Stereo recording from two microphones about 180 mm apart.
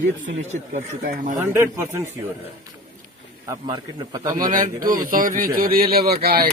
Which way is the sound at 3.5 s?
20° right (ahead or behind).